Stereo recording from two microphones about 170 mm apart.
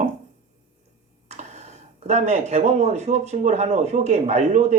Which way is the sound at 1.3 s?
40° right (ahead or behind).